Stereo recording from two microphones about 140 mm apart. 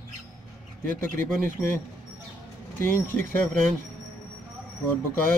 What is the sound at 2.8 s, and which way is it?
Speech, 15° left (ahead or behind).